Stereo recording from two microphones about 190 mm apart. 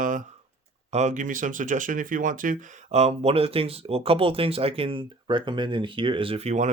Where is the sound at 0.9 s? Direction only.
35° right (ahead or behind).